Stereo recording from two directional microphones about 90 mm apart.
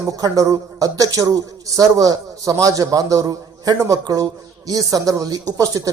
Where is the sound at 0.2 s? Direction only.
40° right (ahead or behind).